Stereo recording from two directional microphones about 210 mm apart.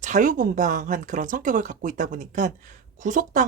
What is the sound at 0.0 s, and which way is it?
Speech, 35° right (ahead or behind).